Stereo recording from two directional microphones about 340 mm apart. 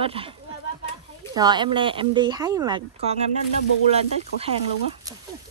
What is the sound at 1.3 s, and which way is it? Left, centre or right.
Speech, centre.